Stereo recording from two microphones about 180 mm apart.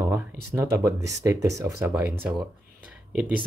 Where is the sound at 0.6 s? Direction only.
15° right (ahead or behind).